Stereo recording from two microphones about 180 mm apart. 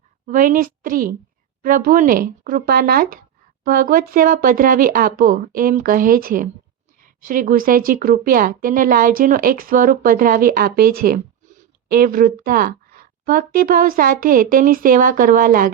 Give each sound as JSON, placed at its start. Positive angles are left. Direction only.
{"t": 0.3, "sound": "a woman's voice", "side_deg": -50}